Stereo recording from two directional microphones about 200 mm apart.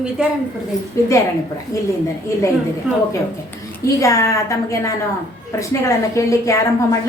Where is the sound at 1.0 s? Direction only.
15° left (ahead or behind).